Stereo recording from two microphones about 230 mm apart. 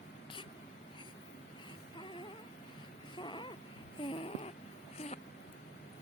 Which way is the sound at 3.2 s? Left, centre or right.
Left.